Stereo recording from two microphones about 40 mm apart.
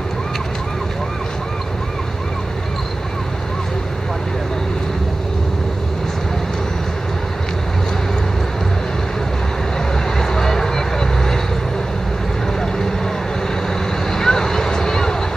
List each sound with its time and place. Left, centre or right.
10.1 s vehicle: centre
14.1 s vehicle: centre